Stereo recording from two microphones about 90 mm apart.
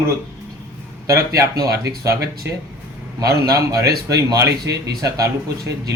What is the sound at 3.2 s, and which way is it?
A man's voice, 40° right (ahead or behind).